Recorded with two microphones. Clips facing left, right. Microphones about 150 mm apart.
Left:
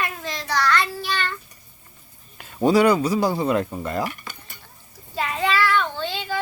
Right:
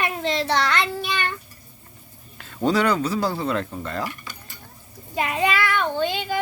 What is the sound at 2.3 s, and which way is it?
Speech, 10° left (ahead or behind).